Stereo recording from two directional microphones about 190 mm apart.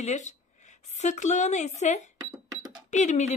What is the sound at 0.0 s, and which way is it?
A woman's voice, 40° left (ahead or behind).